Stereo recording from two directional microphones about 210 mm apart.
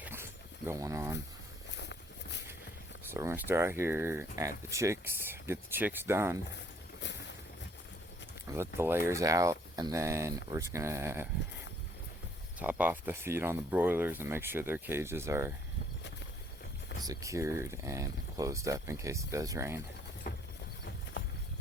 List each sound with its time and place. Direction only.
0.0 s a sound: 10° right (ahead or behind)
0.7 s speech: 15° right (ahead or behind)
1.7 s walk: 55° left (ahead or behind)
3.1 s speech: 10° right (ahead or behind)
8.4 s speech: 10° right (ahead or behind)
12.5 s speech: 5° right (ahead or behind)
17.0 s speech: 15° right (ahead or behind)
20.3 s horse: 45° left (ahead or behind)